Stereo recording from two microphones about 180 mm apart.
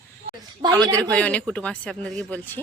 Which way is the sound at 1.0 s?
5° left (ahead or behind).